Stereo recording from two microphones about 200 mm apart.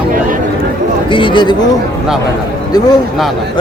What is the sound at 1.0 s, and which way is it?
Speech, 25° left (ahead or behind).